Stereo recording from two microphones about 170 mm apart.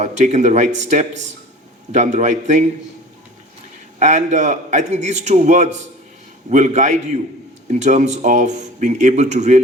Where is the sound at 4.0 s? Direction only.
45° right (ahead or behind).